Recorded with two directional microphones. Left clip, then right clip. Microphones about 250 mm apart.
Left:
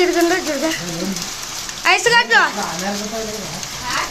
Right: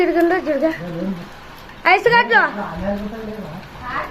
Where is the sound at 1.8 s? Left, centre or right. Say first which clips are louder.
Right 1 dB; centre.